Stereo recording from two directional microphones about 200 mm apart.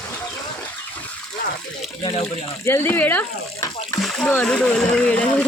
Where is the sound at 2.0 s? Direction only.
30° left (ahead or behind).